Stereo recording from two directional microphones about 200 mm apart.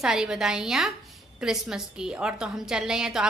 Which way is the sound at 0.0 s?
5° right (ahead or behind).